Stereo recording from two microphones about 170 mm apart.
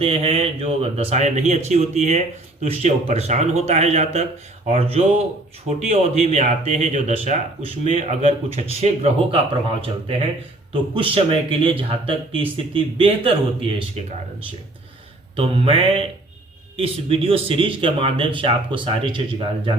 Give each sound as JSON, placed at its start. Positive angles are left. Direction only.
{"t": 0.0, "sound": "speech", "side_deg": -35}
{"t": 15.4, "sound": "speech", "side_deg": -35}